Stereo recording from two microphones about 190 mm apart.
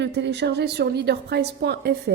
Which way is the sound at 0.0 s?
65° right (ahead or behind).